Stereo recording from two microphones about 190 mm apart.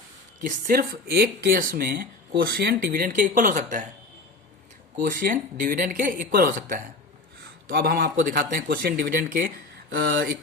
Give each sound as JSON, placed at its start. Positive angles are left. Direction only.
{"t": 0.4, "sound": "speech", "side_deg": -45}
{"t": 5.0, "sound": "speech", "side_deg": -45}
{"t": 9.9, "sound": "speech", "side_deg": -55}